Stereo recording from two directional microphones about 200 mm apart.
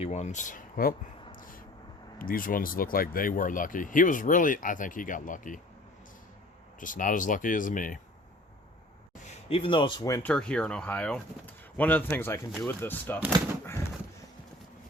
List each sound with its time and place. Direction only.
0.0 s speech: 35° left (ahead or behind)
1.4 s vehicle: 45° left (ahead or behind)
2.1 s speech: 45° left (ahead or behind)
6.7 s speech: 40° left (ahead or behind)
9.2 s speech: 30° left (ahead or behind); by 10.3 s 15° left (ahead or behind)
10.3 s speech: 5° left (ahead or behind)